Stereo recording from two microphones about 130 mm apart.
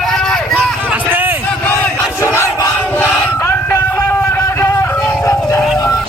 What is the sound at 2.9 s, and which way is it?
Music, 20° left (ahead or behind).